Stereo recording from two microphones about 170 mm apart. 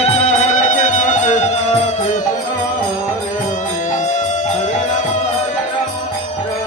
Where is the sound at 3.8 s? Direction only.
50° left (ahead or behind).